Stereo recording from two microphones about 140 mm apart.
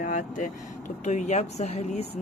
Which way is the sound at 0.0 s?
70° left (ahead or behind).